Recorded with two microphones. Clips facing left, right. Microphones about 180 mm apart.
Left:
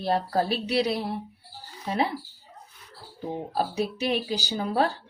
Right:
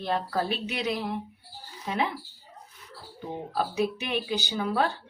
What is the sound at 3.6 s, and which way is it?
A woman's voice, 35° left (ahead or behind).